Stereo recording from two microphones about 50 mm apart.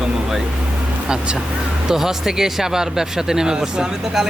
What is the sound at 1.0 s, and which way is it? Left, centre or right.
Speech, centre.